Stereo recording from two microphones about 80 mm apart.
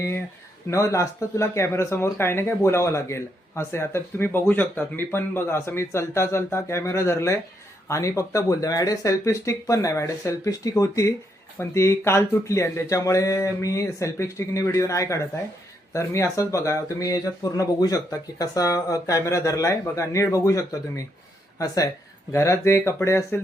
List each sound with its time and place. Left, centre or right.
0.7 s speech: left
22.3 s speech: left